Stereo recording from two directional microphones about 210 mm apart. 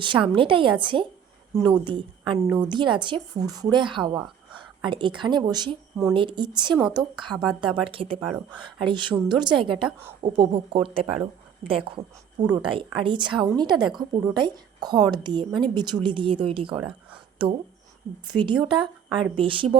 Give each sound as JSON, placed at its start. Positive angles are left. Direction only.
{"t": 0.0, "sound": "speech", "side_deg": -25}